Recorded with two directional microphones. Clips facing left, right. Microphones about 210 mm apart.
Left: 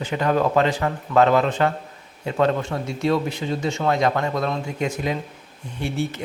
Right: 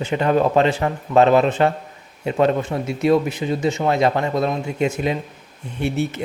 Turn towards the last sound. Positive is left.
turn(degrees=-20)  # may be behind; listen again after turning